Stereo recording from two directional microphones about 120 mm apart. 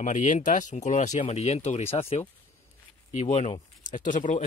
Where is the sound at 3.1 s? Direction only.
75° left (ahead or behind); by 4.4 s 90° left.